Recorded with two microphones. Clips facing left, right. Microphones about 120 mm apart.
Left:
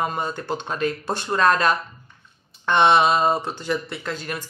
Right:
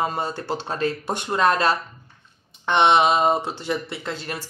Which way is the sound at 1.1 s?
15° right (ahead or behind).